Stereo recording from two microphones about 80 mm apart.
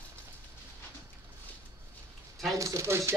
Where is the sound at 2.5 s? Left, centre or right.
Right.